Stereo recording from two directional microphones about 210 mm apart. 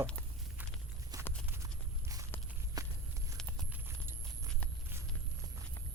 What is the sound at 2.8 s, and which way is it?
Walk, 15° right (ahead or behind).